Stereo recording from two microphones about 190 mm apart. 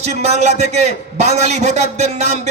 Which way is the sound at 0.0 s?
35° right (ahead or behind).